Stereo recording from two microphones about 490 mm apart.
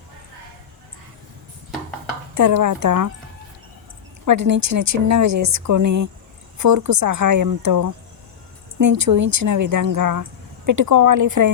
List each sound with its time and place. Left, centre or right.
2.3 s speech: right
4.3 s speech: right